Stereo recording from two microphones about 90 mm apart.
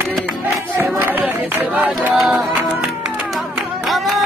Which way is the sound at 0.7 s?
30° right (ahead or behind).